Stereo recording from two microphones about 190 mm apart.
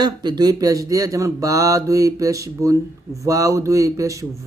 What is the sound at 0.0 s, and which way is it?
Speech, 20° right (ahead or behind).